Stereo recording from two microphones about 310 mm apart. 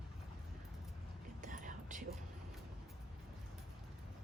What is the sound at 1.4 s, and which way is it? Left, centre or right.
Whispering, right.